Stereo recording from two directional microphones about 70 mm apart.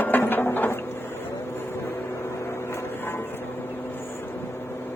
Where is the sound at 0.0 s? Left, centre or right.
Left.